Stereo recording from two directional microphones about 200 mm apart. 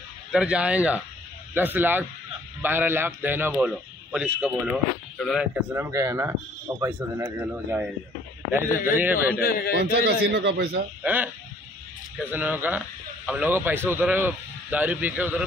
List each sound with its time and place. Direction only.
0.3 s a man's voice: 5° right (ahead or behind)
5.5 s a man's voice: 15° right (ahead or behind)
9.4 s a man's voice: 50° left (ahead or behind)
9.8 s a man's voice: 60° right (ahead or behind)
11.0 s a man's voice: 10° right (ahead or behind)